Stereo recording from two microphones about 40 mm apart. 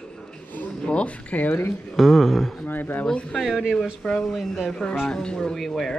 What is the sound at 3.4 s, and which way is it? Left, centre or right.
Speech, centre.